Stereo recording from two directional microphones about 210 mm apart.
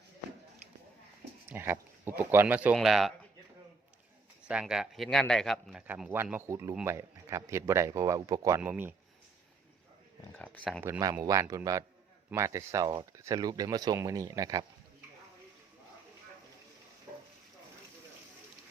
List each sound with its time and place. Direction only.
1.5 s speech: 10° right (ahead or behind)
4.4 s speech: 5° right (ahead or behind)
10.3 s a sound: 5° left (ahead or behind)
10.8 s speech: 15° right (ahead or behind)